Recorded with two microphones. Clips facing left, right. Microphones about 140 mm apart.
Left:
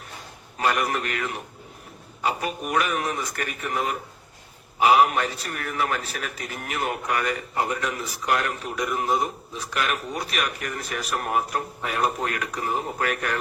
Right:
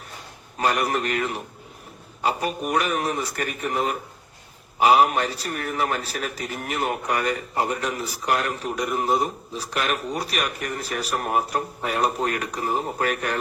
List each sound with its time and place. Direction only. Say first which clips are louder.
0.6 s a man's voice: right 1 dB; 35° right (ahead or behind)